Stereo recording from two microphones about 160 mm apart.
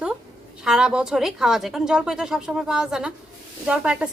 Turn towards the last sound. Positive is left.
turn(degrees=-5)  # may be behind; listen again after turning